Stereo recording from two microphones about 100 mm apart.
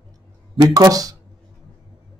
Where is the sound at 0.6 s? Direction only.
40° right (ahead or behind).